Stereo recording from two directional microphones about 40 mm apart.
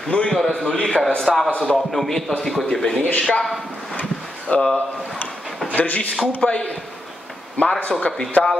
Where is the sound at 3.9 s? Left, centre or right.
Left.